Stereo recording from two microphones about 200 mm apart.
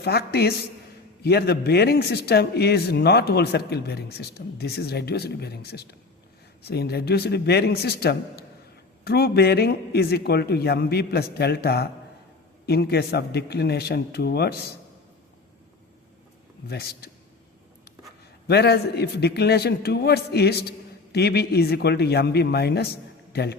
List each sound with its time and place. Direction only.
0.0 s speech: 50° left (ahead or behind)
16.6 s speech: 50° left (ahead or behind)
18.4 s a man's voice: 55° left (ahead or behind)